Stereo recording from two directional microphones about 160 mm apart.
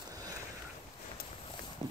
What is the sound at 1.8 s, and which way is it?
Clip-clop, 30° right (ahead or behind).